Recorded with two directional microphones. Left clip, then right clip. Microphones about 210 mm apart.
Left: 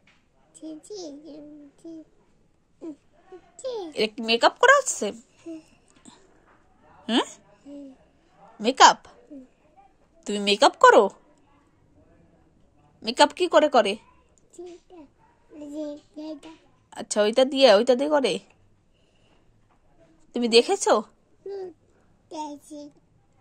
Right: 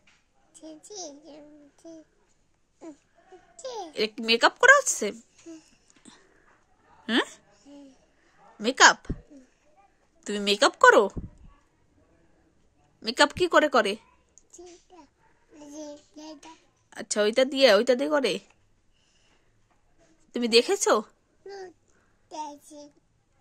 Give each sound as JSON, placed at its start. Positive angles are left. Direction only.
{"t": 0.6, "sound": "a child's voice", "side_deg": -45}
{"t": 4.1, "sound": "speech", "side_deg": -35}
{"t": 5.6, "sound": "babbling", "side_deg": -20}
{"t": 7.1, "sound": "a woman's voice", "side_deg": -20}
{"t": 10.2, "sound": "speech", "side_deg": -20}
{"t": 13.0, "sound": "speech", "side_deg": -20}
{"t": 15.7, "sound": "child singing", "side_deg": -15}
{"t": 16.4, "sound": "speech", "side_deg": -25}
{"t": 20.2, "sound": "a child's voice", "side_deg": -25}
{"t": 22.6, "sound": "speech", "side_deg": -35}